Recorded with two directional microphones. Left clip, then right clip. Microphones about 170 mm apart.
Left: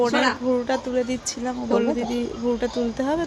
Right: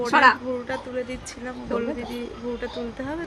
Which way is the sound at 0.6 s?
30° left (ahead or behind).